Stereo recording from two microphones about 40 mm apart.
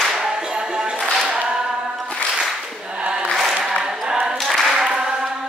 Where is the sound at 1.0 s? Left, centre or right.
Centre.